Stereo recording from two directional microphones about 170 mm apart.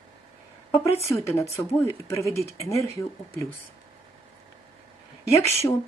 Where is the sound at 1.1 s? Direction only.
15° left (ahead or behind).